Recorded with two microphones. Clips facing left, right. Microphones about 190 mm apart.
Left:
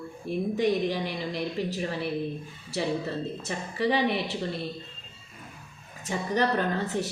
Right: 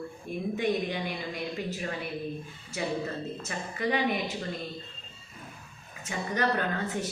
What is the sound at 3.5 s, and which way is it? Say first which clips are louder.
Speech: left 3 dB; 35° left (ahead or behind).